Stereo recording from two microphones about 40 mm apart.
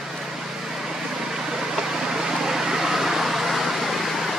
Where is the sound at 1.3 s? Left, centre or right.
Centre.